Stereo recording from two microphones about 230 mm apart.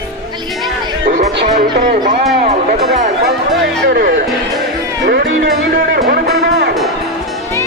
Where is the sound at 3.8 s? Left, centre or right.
Right.